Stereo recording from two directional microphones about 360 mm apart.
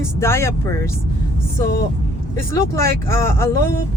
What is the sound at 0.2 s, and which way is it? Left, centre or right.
Speech, centre.